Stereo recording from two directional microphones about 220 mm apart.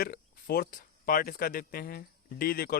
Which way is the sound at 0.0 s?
45° left (ahead or behind).